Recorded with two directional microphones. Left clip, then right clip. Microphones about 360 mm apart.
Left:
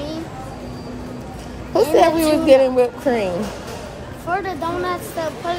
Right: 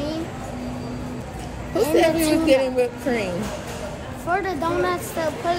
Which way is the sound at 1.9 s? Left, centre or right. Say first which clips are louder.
Left 3 dB; centre.